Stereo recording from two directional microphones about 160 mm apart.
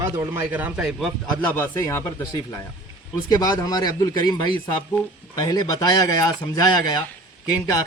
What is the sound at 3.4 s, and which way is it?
A man's voice, 25° left (ahead or behind).